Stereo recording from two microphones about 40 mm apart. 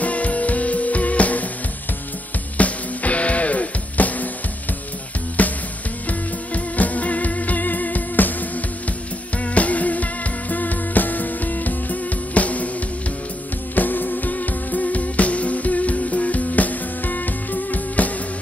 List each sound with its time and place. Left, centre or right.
0.0 s music: left
2.5 s music: left
5.4 s music: left
9.4 s music: left
13.7 s music: left